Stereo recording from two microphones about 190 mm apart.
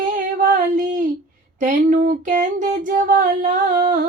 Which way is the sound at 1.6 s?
40° right (ahead or behind).